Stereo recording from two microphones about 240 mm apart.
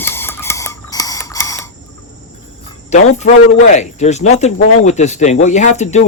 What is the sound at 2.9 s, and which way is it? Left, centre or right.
Speech, left.